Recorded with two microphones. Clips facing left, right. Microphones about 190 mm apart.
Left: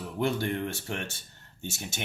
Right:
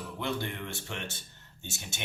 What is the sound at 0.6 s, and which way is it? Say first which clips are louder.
Speech: left 4 dB; 40° left (ahead or behind).